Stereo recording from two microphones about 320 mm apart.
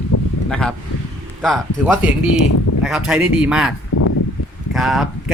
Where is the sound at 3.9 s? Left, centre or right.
Left.